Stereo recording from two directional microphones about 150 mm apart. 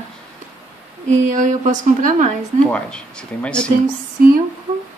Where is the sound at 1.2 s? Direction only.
55° right (ahead or behind).